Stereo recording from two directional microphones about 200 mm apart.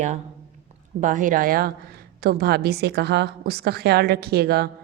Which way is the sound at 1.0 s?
40° right (ahead or behind).